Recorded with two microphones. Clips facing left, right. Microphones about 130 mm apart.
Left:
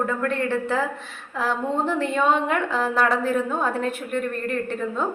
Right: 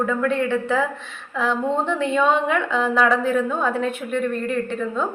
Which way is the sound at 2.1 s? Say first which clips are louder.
Right 3 dB; 40° left (ahead or behind).